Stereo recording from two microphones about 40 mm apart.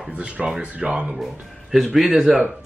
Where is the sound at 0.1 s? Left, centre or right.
Right.